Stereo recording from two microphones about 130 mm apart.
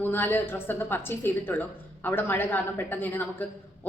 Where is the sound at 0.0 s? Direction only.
15° left (ahead or behind).